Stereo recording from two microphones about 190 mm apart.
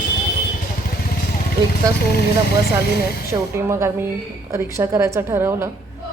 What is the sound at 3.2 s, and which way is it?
A woman's voice, 15° right (ahead or behind).